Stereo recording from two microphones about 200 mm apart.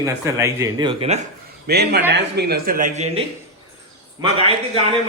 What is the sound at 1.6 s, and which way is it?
Speech, 55° right (ahead or behind).